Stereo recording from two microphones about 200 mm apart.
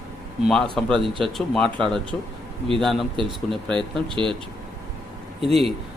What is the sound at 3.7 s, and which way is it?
Speech, 25° right (ahead or behind).